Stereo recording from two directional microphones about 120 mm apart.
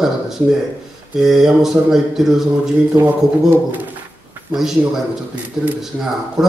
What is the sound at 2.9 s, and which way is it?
Speech, 15° right (ahead or behind).